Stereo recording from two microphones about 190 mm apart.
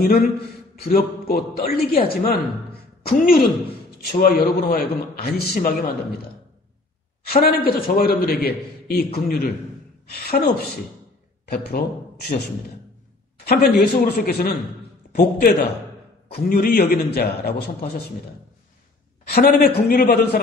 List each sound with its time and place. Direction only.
0.0 s a man's voice: 55° left (ahead or behind)
2.7 s a sound: 55° left (ahead or behind)
4.0 s a man's voice: 50° left (ahead or behind)
7.2 s a woman's voice: 55° left (ahead or behind)
13.5 s a man's voice: 55° left (ahead or behind)
19.2 s a man's voice: 55° left (ahead or behind)